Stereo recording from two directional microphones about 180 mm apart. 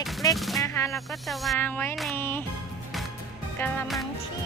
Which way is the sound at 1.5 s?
10° left (ahead or behind).